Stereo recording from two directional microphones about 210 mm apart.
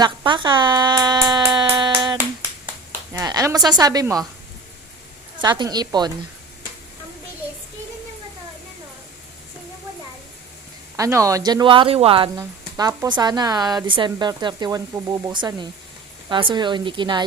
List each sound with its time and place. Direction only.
0.0 s speech: 20° right (ahead or behind)
5.4 s speech: 20° right (ahead or behind)
10.9 s speech: 15° right (ahead or behind)